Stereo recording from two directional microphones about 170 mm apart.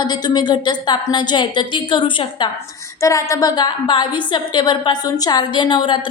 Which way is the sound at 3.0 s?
20° left (ahead or behind).